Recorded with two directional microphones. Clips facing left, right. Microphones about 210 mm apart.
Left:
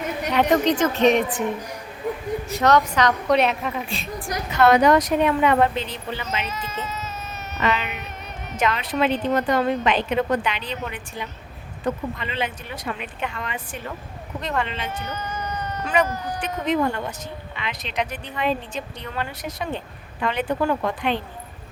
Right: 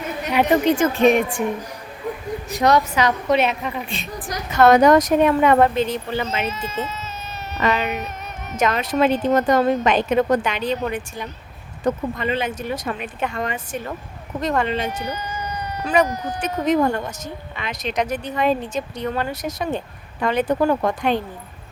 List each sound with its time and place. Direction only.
0.3 s a woman's voice: 10° right (ahead or behind)
2.5 s a woman's voice: 15° right (ahead or behind)
4.5 s speech: 45° right (ahead or behind)
6.5 s speech: 25° right (ahead or behind)
7.5 s speech: 40° right (ahead or behind)
14.8 s a sound: 15° right (ahead or behind)
16.4 s speech: 40° right (ahead or behind)